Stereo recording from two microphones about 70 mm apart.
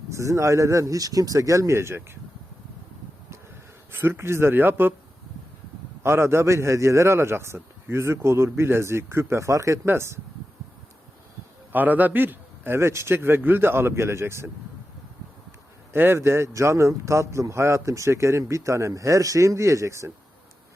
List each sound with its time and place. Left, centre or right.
0.1 s speech: right
3.9 s a man's voice: right
6.0 s a man's voice: right
11.7 s a man's voice: right
15.9 s speech: right